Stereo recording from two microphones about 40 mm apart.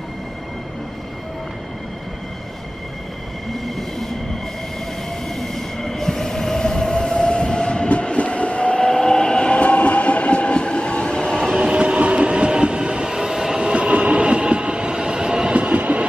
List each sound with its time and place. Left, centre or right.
5.3 s train: centre
11.5 s train: centre
11.8 s train: right